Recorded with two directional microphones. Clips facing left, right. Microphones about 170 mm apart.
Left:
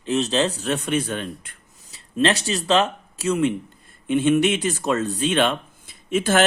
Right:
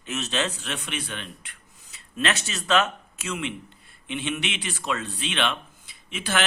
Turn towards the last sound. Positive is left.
turn(degrees=45)  # may be behind; listen again after turning